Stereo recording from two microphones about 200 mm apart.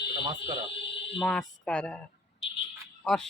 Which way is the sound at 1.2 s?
5° left (ahead or behind).